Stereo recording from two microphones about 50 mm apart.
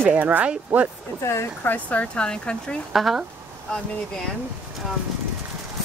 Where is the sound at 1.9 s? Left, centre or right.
Left.